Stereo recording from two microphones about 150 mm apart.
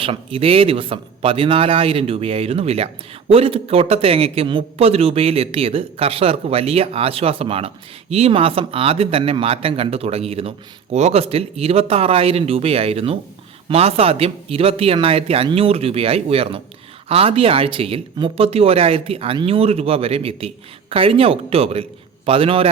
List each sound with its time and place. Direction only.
0.0 s speech: 35° right (ahead or behind)